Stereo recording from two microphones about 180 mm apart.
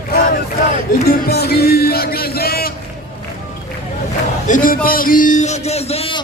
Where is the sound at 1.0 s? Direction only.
60° left (ahead or behind).